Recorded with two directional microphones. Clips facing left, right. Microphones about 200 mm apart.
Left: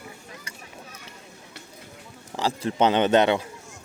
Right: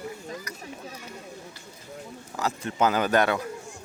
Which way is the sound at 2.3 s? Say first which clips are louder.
Left 4 dB; 30° left (ahead or behind).